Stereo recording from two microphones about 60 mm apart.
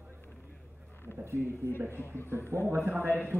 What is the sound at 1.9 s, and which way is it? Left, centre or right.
Speech, left.